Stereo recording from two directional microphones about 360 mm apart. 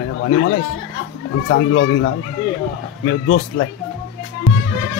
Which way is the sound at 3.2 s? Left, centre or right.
Left.